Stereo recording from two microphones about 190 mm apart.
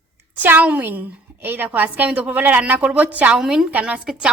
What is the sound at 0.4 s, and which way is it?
A woman's voice, 10° right (ahead or behind).